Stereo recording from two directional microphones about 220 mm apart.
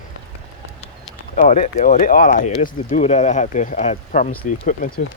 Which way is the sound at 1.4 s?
35° left (ahead or behind).